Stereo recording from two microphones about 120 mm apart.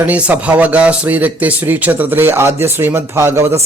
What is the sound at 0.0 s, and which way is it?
A man's voice, 10° right (ahead or behind).